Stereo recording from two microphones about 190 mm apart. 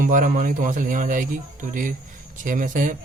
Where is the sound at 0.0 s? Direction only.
45° right (ahead or behind).